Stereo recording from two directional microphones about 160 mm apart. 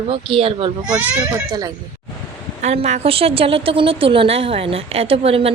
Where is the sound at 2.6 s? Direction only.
45° right (ahead or behind).